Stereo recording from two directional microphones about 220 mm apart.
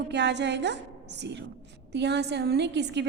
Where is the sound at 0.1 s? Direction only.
50° right (ahead or behind).